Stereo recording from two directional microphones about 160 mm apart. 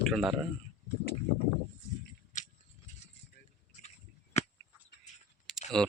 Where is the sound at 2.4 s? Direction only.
50° left (ahead or behind).